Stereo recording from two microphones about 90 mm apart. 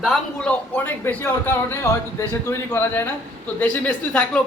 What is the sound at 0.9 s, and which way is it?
A man's voice, 25° left (ahead or behind).